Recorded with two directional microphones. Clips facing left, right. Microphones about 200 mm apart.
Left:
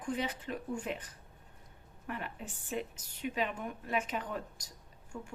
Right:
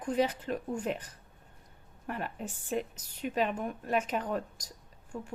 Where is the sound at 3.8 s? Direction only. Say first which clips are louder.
Right 4 dB; 40° right (ahead or behind).